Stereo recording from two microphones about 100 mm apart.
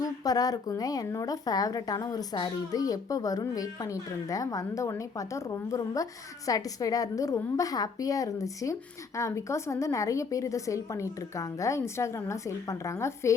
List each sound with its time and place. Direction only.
0.0 s a woman's voice: 40° left (ahead or behind)